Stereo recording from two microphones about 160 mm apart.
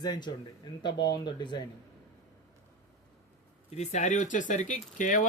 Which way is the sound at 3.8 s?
50° left (ahead or behind).